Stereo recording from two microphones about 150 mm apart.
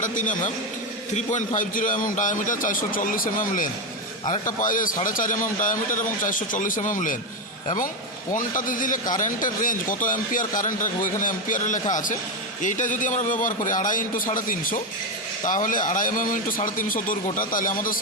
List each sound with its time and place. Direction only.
0.0 s speech: 60° left (ahead or behind)
8.3 s speech: 60° left (ahead or behind)